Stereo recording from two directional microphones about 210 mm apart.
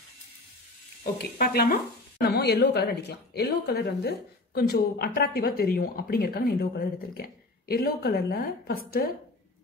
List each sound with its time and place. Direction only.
1.1 s speech: 50° left (ahead or behind)